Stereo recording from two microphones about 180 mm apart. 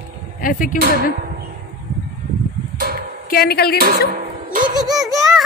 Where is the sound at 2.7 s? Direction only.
60° right (ahead or behind).